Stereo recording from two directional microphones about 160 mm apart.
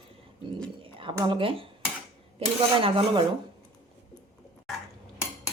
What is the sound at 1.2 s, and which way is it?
Speech, 30° right (ahead or behind).